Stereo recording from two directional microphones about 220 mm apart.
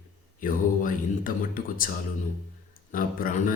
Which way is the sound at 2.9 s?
40° left (ahead or behind).